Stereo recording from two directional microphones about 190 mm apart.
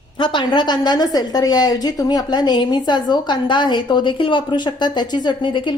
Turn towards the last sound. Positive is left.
turn(degrees=25)  # may be behind; listen again after turning